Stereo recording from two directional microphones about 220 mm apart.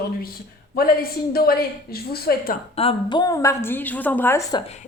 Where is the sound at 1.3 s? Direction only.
45° left (ahead or behind).